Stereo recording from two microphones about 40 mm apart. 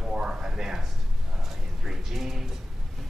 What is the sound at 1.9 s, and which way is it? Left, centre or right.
Speech, centre.